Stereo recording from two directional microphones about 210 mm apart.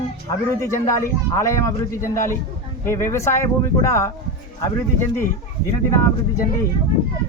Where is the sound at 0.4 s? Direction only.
15° left (ahead or behind).